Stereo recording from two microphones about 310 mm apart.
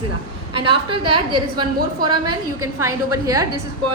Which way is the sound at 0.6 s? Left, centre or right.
Centre.